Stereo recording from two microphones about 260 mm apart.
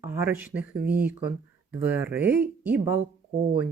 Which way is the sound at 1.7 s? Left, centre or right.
Centre.